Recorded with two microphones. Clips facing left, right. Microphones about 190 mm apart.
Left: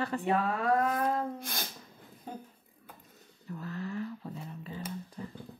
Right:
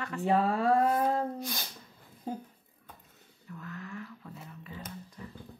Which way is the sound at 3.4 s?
35° left (ahead or behind).